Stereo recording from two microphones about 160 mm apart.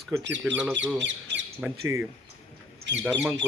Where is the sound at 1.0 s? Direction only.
90° right.